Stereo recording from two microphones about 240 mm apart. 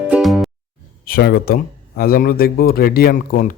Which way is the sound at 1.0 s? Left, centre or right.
Left.